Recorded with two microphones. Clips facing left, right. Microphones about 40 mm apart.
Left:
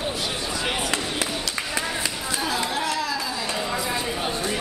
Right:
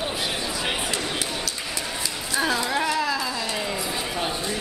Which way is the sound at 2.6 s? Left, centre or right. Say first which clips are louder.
Right 2 dB; centre.